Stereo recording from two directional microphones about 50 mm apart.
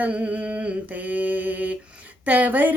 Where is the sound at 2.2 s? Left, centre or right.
Right.